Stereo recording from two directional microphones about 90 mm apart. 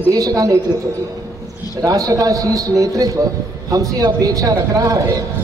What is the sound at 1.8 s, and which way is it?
A woman's voice, 35° right (ahead or behind).